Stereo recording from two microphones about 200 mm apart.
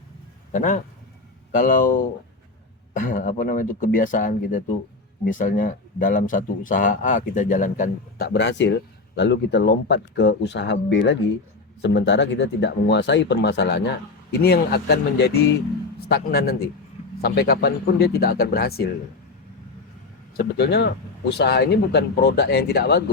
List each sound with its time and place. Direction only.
0.5 s speech: 40° left (ahead or behind)
8.3 s speech: 60° left (ahead or behind)
20.3 s speech: 50° left (ahead or behind)